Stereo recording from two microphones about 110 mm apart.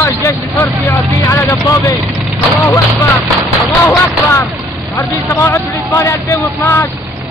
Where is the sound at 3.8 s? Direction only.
20° left (ahead or behind).